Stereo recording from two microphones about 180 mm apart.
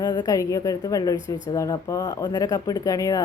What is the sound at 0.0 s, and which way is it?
Speech, 25° left (ahead or behind).